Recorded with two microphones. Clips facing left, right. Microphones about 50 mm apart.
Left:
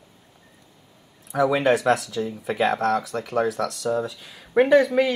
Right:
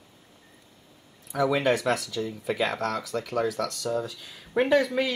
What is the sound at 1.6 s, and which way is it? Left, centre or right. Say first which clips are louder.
Speech: left 5 dB; left.